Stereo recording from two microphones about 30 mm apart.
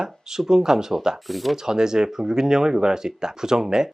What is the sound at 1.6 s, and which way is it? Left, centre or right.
Speech, right.